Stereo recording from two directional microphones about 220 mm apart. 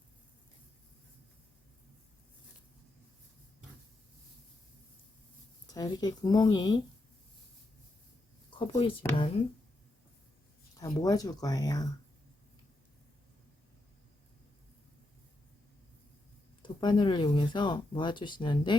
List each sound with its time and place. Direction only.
5.7 s speech: 15° left (ahead or behind)
8.4 s a sound: 20° left (ahead or behind)
10.8 s speech: 15° left (ahead or behind)
16.6 s speech: 20° left (ahead or behind)